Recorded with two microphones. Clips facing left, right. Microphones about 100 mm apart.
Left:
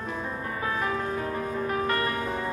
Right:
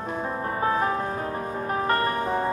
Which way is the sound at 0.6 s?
35° right (ahead or behind).